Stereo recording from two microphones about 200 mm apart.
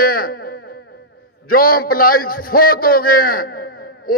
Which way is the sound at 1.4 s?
45° left (ahead or behind).